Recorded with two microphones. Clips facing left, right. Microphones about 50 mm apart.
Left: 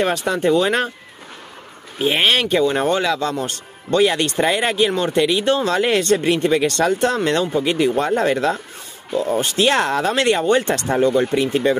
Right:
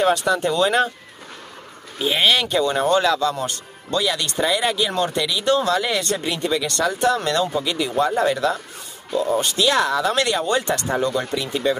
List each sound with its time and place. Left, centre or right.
0.0 s speech: left
2.0 s speech: left
2.5 s speech: left
3.3 s speech: left
5.4 s speech: left
8.0 s speech: left
9.1 s speech: left
9.6 s speech: left
11.3 s speech: left